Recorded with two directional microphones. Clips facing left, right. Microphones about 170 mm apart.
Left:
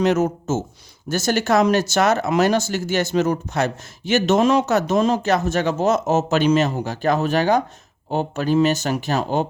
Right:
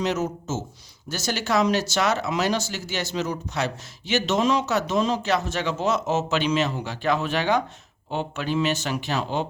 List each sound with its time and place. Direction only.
0.0 s speech: 50° left (ahead or behind)